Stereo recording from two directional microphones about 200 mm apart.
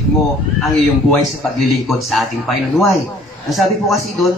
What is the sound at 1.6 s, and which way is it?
A man's voice, centre (ahead or behind).